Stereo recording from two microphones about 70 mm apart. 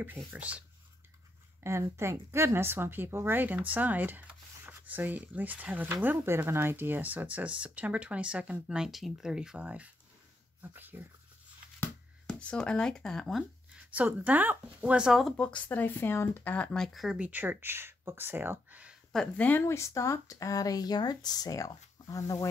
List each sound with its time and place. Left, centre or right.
0.3 s speech: right
1.6 s speech: right; by 9.7 s centre
10.6 s speech: right
12.3 s speech: centre
13.9 s speech: right
15.0 s speech: centre
15.3 s speech: centre
16.7 s speech: centre
17.2 s speech: right
19.3 s speech: left
19.6 s speech: left